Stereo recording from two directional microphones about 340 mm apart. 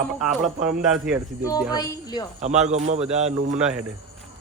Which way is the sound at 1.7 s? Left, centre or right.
Centre.